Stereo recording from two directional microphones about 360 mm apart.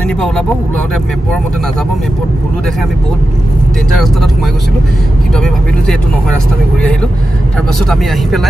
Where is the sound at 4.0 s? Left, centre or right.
Centre.